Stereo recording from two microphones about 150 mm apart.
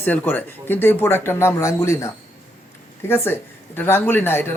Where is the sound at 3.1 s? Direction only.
15° left (ahead or behind).